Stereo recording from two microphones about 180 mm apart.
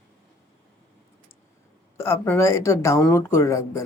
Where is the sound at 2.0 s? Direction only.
10° left (ahead or behind).